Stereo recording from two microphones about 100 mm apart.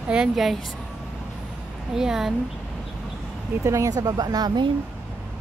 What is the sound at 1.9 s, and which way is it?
Speech, 5° right (ahead or behind).